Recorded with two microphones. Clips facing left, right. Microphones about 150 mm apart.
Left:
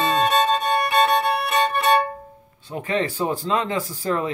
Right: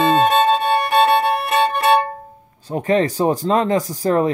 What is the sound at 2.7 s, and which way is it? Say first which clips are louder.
Speech: right 7 dB; 40° right (ahead or behind).